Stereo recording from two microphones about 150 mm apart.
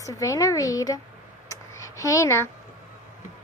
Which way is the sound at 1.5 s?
20° left (ahead or behind).